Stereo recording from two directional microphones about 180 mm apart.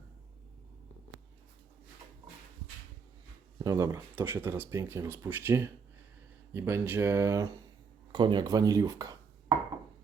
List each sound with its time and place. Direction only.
3.6 s speech: 20° right (ahead or behind)